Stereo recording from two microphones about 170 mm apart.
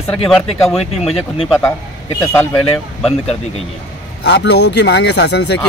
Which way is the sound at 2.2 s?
10° left (ahead or behind).